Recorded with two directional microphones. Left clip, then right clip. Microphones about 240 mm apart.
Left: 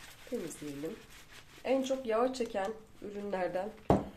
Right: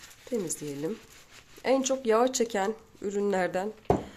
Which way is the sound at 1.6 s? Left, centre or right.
Right.